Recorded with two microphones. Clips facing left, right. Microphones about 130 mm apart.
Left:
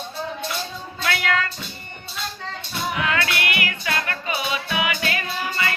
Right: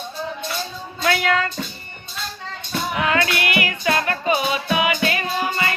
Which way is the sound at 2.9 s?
35° right (ahead or behind).